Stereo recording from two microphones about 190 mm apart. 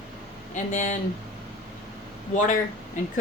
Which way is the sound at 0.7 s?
40° left (ahead or behind).